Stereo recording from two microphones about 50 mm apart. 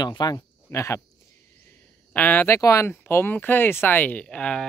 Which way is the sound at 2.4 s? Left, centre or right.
Left.